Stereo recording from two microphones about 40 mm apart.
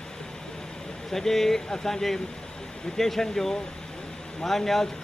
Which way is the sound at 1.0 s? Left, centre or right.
Centre.